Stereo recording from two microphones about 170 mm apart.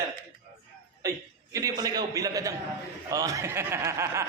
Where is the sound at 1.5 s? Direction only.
20° right (ahead or behind).